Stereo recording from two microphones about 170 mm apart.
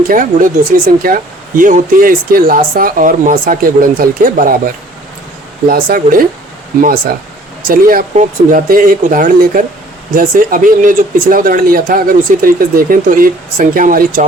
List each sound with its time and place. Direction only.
0.1 s speech: 55° right (ahead or behind)